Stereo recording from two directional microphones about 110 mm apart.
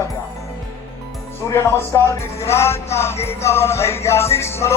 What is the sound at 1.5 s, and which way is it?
Speech, 25° left (ahead or behind).